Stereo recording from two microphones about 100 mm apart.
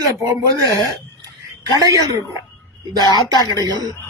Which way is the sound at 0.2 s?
35° right (ahead or behind).